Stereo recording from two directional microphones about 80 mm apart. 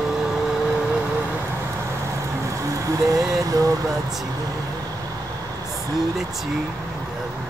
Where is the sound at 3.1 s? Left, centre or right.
Right.